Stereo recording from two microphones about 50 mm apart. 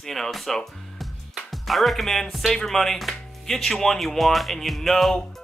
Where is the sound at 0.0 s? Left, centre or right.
Centre.